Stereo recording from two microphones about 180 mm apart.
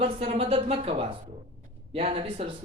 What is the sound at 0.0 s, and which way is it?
Speech, 35° right (ahead or behind).